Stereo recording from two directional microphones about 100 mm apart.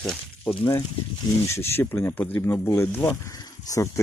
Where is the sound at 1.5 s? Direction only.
25° left (ahead or behind).